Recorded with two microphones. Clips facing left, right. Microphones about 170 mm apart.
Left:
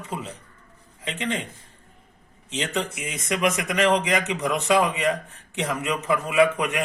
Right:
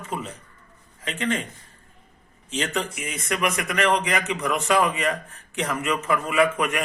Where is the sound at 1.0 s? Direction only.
15° left (ahead or behind).